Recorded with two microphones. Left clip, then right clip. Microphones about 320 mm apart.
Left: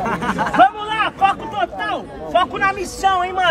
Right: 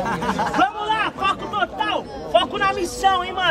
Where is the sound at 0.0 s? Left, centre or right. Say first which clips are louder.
Left 2 dB; centre.